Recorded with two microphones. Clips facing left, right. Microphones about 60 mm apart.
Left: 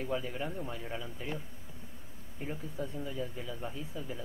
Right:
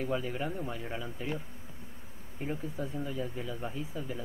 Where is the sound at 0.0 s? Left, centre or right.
Centre.